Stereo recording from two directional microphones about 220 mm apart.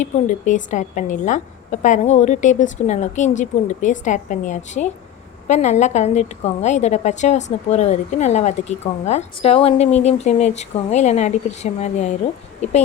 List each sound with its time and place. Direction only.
0.0 s a woman's voice: 35° left (ahead or behind)